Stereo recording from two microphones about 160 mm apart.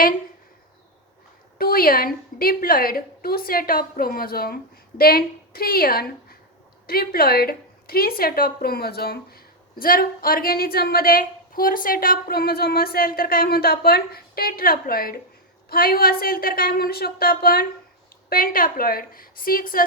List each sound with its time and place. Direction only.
1.5 s a woman's voice: 70° left (ahead or behind)